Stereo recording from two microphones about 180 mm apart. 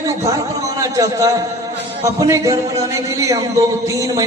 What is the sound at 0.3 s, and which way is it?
A man's voice, 20° right (ahead or behind).